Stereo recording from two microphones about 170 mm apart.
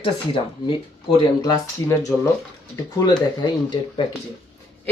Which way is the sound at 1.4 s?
20° left (ahead or behind).